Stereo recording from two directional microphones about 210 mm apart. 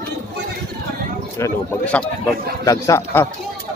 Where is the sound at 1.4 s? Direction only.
10° left (ahead or behind).